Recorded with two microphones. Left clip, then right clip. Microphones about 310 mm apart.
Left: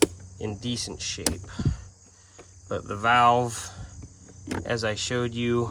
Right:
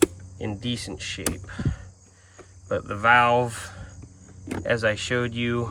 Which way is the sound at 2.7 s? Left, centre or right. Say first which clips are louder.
Right 4 dB; centre.